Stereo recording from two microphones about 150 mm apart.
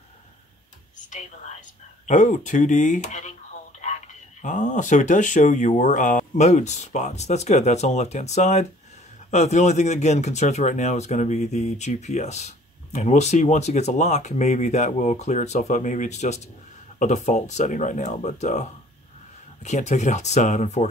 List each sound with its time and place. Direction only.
2.0 s speech: 55° left (ahead or behind)
4.4 s speech: 55° left (ahead or behind)